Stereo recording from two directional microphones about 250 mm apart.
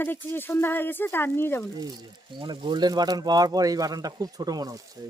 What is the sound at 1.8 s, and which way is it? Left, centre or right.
Speech, centre.